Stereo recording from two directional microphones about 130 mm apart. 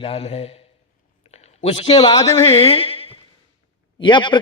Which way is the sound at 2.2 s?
25° left (ahead or behind).